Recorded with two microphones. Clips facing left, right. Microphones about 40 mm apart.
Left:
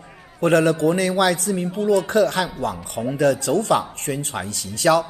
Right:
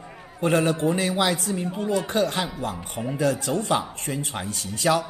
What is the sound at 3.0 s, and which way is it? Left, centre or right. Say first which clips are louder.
Speech: left 5 dB; centre.